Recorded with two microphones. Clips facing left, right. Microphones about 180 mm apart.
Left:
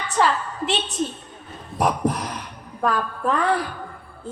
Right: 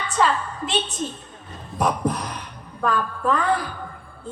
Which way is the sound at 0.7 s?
35° left (ahead or behind).